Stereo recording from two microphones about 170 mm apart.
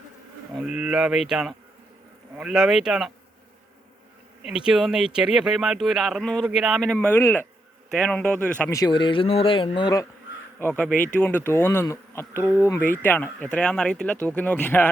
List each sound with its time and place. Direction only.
0.5 s speech: 5° right (ahead or behind)
4.4 s speech: 5° right (ahead or behind); by 7.4 s 15° left (ahead or behind)
7.9 s speech: 5° left (ahead or behind)
8.7 s speech: 25° left (ahead or behind)
10.8 s speech: 10° left (ahead or behind)